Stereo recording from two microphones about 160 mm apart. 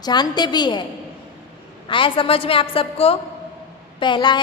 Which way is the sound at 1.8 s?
30° left (ahead or behind).